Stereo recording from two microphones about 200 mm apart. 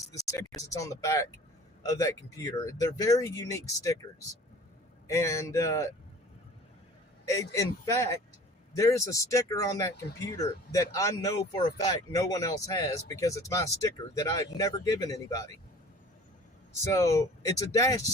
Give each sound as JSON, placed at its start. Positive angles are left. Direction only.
{"t": 0.3, "sound": "speech", "side_deg": 15}
{"t": 5.0, "sound": "speech", "side_deg": 15}
{"t": 7.3, "sound": "speech", "side_deg": 15}
{"t": 16.8, "sound": "speech", "side_deg": 15}